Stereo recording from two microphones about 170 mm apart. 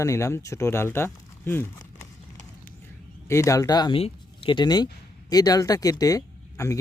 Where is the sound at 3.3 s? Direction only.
20° left (ahead or behind).